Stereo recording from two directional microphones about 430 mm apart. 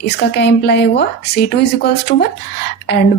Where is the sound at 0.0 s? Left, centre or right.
Left.